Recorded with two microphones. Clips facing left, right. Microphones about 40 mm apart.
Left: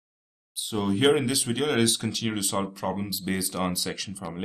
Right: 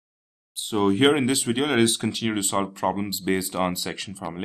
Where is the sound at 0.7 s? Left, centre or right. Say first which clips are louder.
Right 3 dB; centre.